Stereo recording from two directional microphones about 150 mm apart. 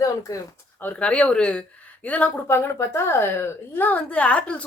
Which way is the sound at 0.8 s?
10° left (ahead or behind).